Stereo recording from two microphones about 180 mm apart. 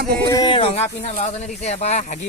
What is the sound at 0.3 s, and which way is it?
Speech, 20° left (ahead or behind).